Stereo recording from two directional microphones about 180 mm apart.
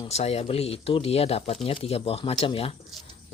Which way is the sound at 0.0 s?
35° left (ahead or behind).